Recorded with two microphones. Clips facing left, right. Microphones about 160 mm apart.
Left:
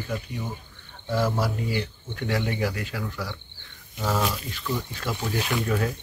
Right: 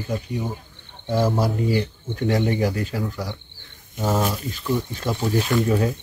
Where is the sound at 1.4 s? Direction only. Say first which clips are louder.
Right 6 dB; 35° right (ahead or behind).